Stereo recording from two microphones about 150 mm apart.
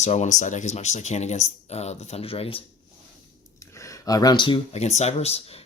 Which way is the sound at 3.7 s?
20° left (ahead or behind).